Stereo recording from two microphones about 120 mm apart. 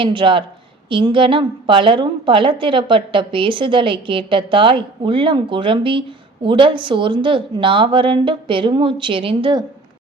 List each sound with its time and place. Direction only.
0.0 s a woman's voice: 45° right (ahead or behind)